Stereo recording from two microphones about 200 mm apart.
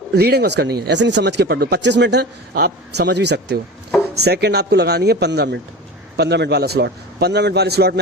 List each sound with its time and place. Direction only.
0.1 s speech: 55° right (ahead or behind)